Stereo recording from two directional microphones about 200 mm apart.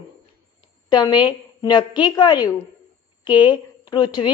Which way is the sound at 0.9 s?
20° left (ahead or behind).